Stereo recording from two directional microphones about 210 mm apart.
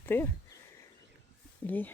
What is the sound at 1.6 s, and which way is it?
Speech, 10° left (ahead or behind).